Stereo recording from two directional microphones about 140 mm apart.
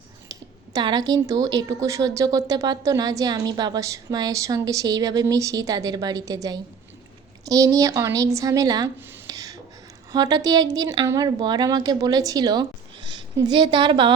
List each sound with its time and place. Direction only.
0.3 s a woman's voice: 30° right (ahead or behind)
9.2 s a sound: 25° right (ahead or behind)
10.1 s a woman's voice: 30° right (ahead or behind)